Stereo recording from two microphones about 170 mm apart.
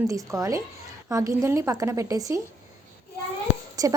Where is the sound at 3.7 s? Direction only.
20° right (ahead or behind).